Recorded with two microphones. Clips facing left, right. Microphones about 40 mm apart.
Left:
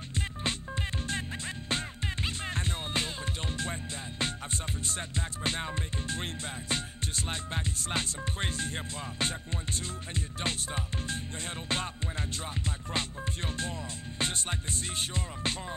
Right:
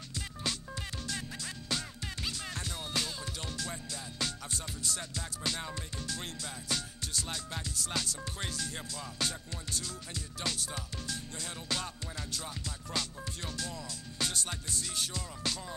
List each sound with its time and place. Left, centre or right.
0.4 s music: left